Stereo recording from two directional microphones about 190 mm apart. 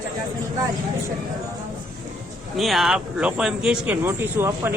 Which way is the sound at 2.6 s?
Centre (ahead or behind).